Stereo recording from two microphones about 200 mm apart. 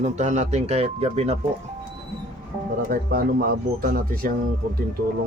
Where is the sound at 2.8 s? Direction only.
45° right (ahead or behind).